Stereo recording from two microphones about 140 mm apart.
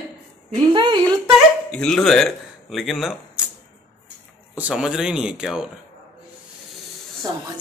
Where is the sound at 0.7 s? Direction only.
35° right (ahead or behind).